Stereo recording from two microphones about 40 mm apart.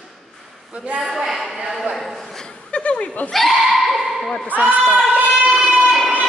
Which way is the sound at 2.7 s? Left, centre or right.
Left.